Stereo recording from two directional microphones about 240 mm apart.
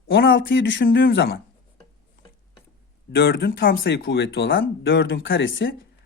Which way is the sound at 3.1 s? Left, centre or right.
Left.